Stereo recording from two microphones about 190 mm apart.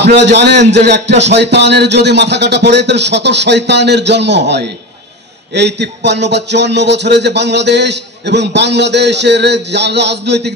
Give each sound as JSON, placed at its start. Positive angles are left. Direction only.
{"t": 0.0, "sound": "a man's voice", "side_deg": -65}